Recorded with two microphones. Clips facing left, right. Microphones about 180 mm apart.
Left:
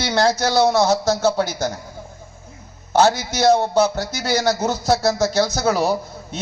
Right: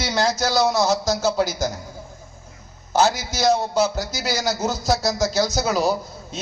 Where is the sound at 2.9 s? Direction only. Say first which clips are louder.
Left 3 dB; 60° left (ahead or behind).